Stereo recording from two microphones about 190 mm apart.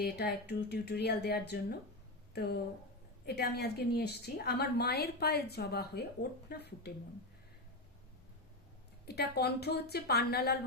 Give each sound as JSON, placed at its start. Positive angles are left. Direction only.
{"t": 0.0, "sound": "a woman's voice", "side_deg": 55}
{"t": 9.0, "sound": "a woman's voice", "side_deg": 55}